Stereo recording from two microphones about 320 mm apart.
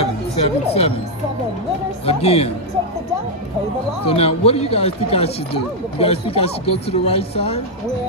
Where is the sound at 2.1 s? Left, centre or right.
Centre.